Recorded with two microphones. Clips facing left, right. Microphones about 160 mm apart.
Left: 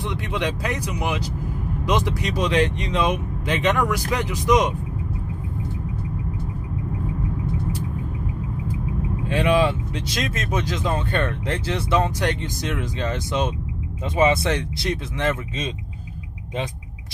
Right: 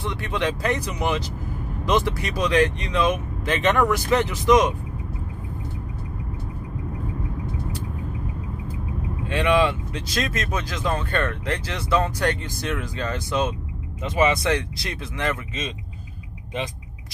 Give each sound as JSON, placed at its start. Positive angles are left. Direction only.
{"t": 0.0, "sound": "speech", "side_deg": 15}
{"t": 10.1, "sound": "speech", "side_deg": 20}